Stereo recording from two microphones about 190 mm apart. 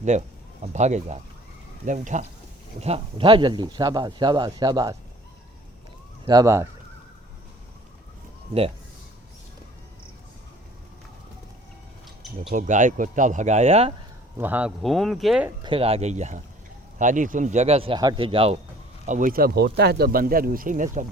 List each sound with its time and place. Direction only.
0.1 s speech: 40° right (ahead or behind); by 4.9 s 20° right (ahead or behind)
6.2 s speech: 20° right (ahead or behind)
12.5 s speech: 40° right (ahead or behind)
14.3 s speech: 10° right (ahead or behind)
15.6 s speech: 30° right (ahead or behind)
19.0 s speech: 40° right (ahead or behind)